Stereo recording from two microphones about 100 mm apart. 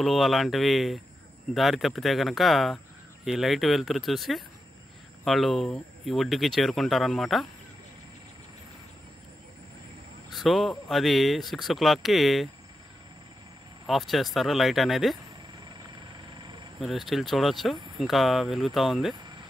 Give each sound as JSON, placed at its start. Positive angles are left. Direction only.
{"t": 0.0, "sound": "speech", "side_deg": 0}
{"t": 10.3, "sound": "speech", "side_deg": 0}
{"t": 13.8, "sound": "speech", "side_deg": 0}
{"t": 16.3, "sound": "vehicle", "side_deg": -50}
{"t": 16.8, "sound": "speech", "side_deg": 0}